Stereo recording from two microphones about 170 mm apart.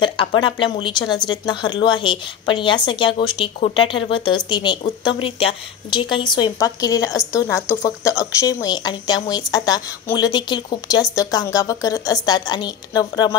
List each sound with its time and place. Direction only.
0.0 s a woman's voice: 30° left (ahead or behind)